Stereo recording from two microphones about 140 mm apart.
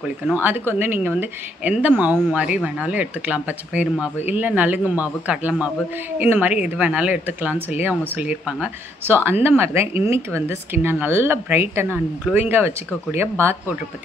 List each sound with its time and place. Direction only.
0.3 s a woman's voice: 15° right (ahead or behind)